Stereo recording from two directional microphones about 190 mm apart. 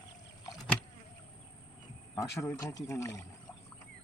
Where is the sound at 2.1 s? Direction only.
15° left (ahead or behind).